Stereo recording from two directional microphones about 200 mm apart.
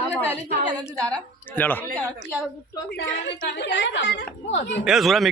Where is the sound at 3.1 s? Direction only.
65° left (ahead or behind).